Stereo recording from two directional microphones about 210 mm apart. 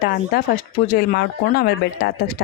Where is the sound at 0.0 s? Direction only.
45° left (ahead or behind).